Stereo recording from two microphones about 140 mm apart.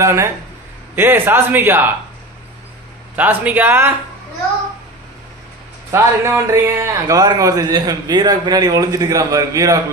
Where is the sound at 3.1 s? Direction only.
10° right (ahead or behind).